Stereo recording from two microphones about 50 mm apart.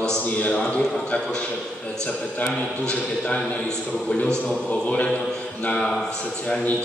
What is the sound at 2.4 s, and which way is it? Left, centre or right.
Speech, left.